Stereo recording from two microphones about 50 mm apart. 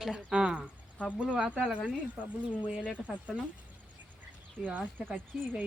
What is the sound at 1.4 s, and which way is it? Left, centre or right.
Speech, right.